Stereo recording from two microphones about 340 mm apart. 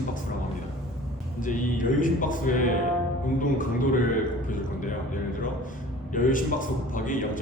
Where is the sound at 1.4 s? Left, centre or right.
Left.